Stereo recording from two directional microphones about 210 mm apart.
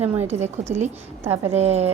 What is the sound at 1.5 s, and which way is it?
Speech, 30° right (ahead or behind).